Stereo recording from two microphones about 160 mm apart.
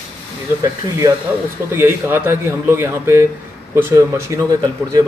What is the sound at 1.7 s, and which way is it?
A man's voice, 15° right (ahead or behind).